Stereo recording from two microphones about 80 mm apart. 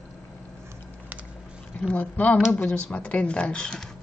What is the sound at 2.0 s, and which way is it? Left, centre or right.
A woman's voice, left.